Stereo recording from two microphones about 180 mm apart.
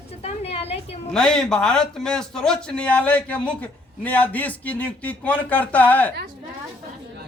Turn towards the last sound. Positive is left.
turn(degrees=10)  # may be behind; listen again after turning